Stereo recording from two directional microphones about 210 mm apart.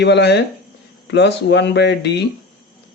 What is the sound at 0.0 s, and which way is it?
Speech, 55° left (ahead or behind).